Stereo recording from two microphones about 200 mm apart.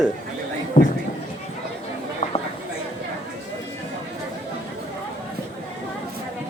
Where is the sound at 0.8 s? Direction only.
40° left (ahead or behind).